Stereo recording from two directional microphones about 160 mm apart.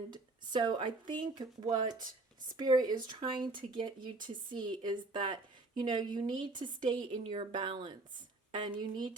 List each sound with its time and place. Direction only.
0.1 s speech: 30° right (ahead or behind)